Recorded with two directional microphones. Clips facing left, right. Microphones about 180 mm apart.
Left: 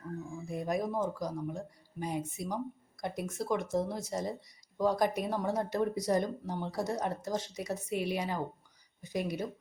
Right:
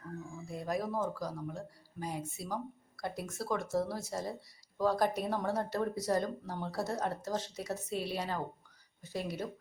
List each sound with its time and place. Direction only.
0.4 s speech: 20° left (ahead or behind)